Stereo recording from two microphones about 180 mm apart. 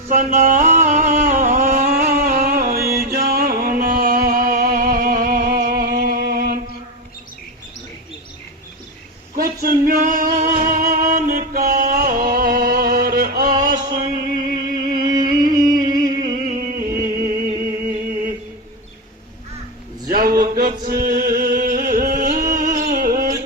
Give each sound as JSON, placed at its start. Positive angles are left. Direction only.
{"t": 0.1, "sound": "music", "side_deg": -45}
{"t": 9.3, "sound": "music", "side_deg": -55}
{"t": 14.9, "sound": "music", "side_deg": -25}
{"t": 15.3, "sound": "a sound", "side_deg": -50}
{"t": 15.9, "sound": "music", "side_deg": -20}
{"t": 16.4, "sound": "music", "side_deg": -50}
{"t": 20.1, "sound": "a sound", "side_deg": -55}
{"t": 20.4, "sound": "chant", "side_deg": -55}
{"t": 22.8, "sound": "music", "side_deg": -50}